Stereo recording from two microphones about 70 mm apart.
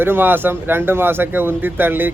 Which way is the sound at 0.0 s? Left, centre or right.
Right.